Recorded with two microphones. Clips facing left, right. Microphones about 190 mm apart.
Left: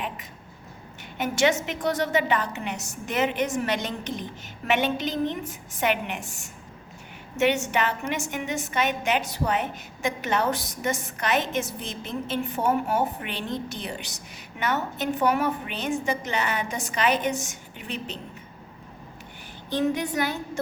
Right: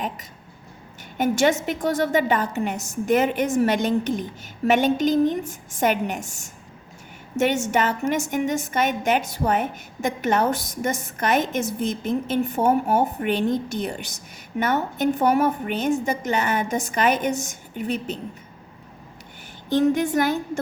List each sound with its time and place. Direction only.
1.2 s a woman's voice: 45° right (ahead or behind)
19.7 s a woman's voice: 45° right (ahead or behind)